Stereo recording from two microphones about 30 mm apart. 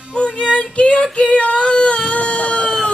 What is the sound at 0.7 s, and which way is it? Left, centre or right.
Female singing, left.